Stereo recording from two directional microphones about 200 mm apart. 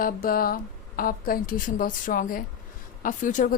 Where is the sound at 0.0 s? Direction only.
45° left (ahead or behind).